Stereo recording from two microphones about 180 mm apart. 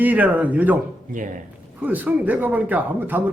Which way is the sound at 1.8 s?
10° right (ahead or behind).